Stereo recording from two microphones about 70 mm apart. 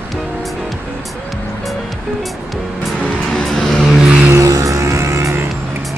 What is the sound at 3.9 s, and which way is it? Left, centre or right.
Vehicle, centre.